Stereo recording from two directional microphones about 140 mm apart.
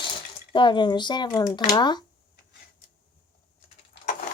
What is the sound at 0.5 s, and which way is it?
Speech, 35° left (ahead or behind).